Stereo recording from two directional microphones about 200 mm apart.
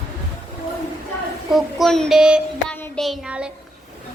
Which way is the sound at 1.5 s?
Centre (ahead or behind).